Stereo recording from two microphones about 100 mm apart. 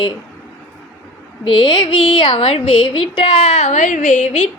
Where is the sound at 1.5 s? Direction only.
60° left (ahead or behind).